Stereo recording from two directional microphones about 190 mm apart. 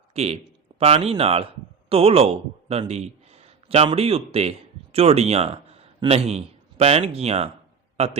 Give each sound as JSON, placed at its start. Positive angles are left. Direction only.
{"t": 0.1, "sound": "a man's voice", "side_deg": -35}